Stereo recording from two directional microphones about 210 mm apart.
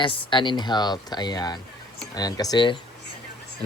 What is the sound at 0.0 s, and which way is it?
Speech, 25° left (ahead or behind).